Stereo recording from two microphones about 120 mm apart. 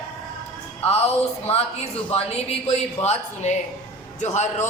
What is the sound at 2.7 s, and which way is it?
A man's voice, 65° left (ahead or behind).